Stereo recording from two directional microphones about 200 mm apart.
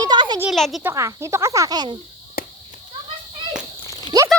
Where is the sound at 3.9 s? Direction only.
20° left (ahead or behind).